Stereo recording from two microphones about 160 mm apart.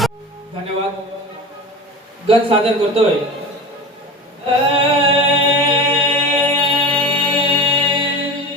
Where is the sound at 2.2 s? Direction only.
35° right (ahead or behind).